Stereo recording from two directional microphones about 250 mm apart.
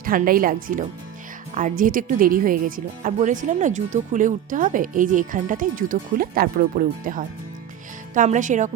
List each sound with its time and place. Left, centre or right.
0.0 s speech: right